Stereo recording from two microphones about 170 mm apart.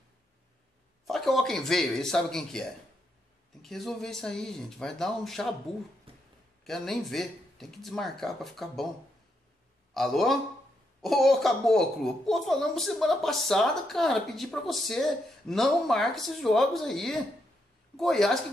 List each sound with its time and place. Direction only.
1.0 s a woman's voice: centre (ahead or behind)
6.1 s a sound: 35° right (ahead or behind)
6.6 s a woman's voice: centre (ahead or behind)
9.9 s a woman's voice: centre (ahead or behind)